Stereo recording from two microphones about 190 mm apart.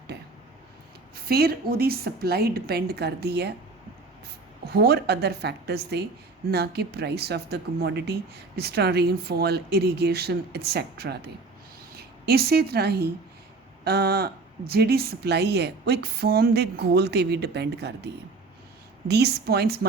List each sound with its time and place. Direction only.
0.1 s a sound: 60° right (ahead or behind)
1.1 s speech: 55° right (ahead or behind)
4.7 s a woman's voice: 55° right (ahead or behind)